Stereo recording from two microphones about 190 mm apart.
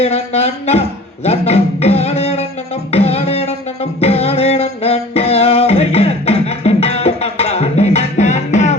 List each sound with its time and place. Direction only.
0.0 s speech: 35° left (ahead or behind)
2.9 s music: 35° left (ahead or behind)